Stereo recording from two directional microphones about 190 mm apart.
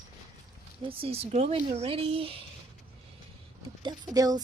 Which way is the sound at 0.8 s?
30° right (ahead or behind).